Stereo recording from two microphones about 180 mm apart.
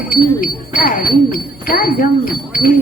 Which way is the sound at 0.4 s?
55° left (ahead or behind).